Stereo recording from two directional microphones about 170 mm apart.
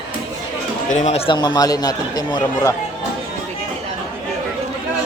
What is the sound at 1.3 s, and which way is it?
Speech, 25° left (ahead or behind).